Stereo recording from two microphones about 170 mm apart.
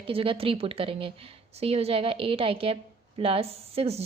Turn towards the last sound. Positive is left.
turn(degrees=-35)  # may be behind; listen again after turning